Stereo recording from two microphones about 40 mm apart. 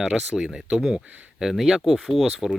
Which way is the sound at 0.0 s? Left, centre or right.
Centre.